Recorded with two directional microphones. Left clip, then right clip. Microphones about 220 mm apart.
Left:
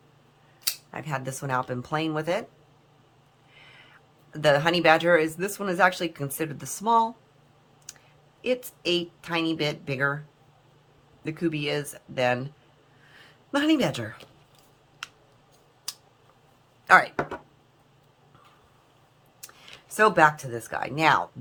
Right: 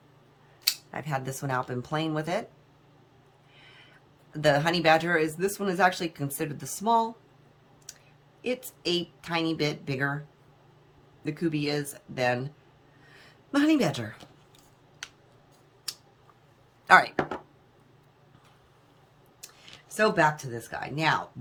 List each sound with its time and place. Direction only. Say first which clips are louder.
0.9 s speech: even; 5° left (ahead or behind)
4.3 s speech: left 2 dB; 10° left (ahead or behind)
8.4 s speech: left 5 dB; 10° left (ahead or behind)
11.2 s speech: left 1 dB; 10° left (ahead or behind)
13.5 s speech: left 1 dB; 10° left (ahead or behind)
16.8 s speech: left 1 dB; 5° left (ahead or behind)
20.0 s speech: left 4 dB; 20° left (ahead or behind)